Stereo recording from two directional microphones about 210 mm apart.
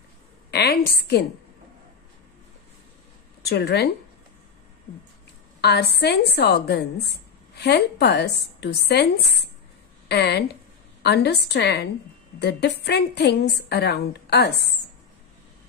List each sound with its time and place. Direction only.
0.5 s a sound: 50° left (ahead or behind)
3.4 s a woman's voice: 50° left (ahead or behind)
5.6 s a woman's voice: 50° left (ahead or behind)